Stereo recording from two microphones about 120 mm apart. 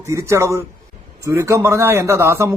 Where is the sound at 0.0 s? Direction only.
25° right (ahead or behind).